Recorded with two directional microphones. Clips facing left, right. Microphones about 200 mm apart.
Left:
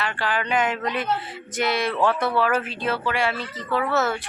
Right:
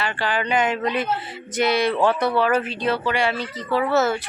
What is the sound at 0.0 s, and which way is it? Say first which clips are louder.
A woman's voice: right 2 dB; centre (ahead or behind).